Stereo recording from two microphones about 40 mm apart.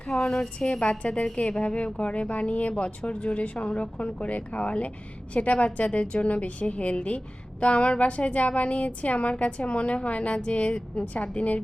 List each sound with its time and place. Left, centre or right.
0.1 s a woman's voice: left